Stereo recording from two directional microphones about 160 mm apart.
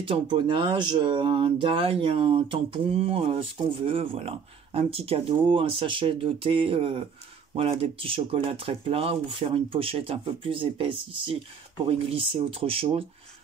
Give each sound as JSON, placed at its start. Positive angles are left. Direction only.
{"t": 0.0, "sound": "speech", "side_deg": -30}